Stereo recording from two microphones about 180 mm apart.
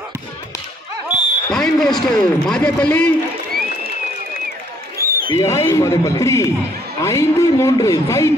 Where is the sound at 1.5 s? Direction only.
Centre (ahead or behind).